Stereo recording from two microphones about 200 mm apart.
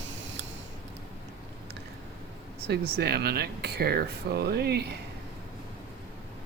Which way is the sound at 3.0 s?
55° right (ahead or behind).